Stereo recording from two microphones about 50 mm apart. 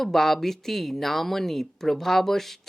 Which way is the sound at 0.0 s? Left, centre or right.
Centre.